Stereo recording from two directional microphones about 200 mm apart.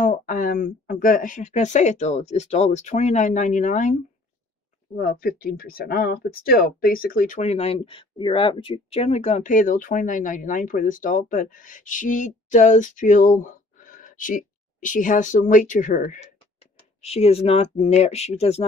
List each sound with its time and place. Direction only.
0.0 s speech: 40° left (ahead or behind)
4.9 s speech: 50° left (ahead or behind); by 18.7 s 30° left (ahead or behind)